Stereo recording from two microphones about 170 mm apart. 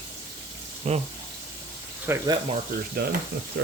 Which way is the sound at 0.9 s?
40° right (ahead or behind).